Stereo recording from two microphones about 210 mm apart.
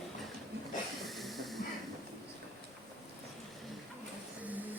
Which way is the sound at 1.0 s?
Centre (ahead or behind).